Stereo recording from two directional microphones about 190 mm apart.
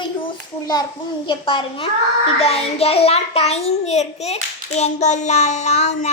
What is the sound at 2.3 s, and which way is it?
A child's voice, 30° left (ahead or behind).